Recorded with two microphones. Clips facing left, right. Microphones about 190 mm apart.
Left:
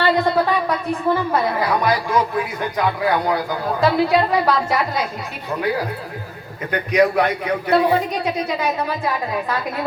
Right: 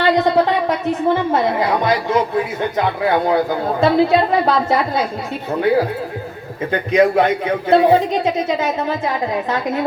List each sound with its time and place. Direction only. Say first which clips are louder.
0.0 s a woman's voice: right 3 dB; 20° right (ahead or behind)
6.7 s speech: right 2 dB; 25° right (ahead or behind)